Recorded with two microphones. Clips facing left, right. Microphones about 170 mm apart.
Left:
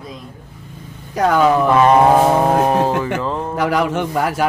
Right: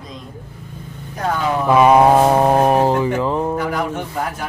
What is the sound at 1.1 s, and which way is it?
Speech, 90° left.